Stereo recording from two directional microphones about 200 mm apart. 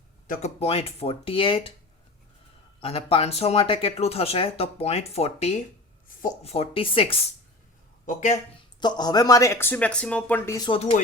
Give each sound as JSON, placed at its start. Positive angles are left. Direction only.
{"t": 0.3, "sound": "speech", "side_deg": 30}
{"t": 2.8, "sound": "speech", "side_deg": 30}
{"t": 8.0, "sound": "speech", "side_deg": 40}
{"t": 8.8, "sound": "speech", "side_deg": 20}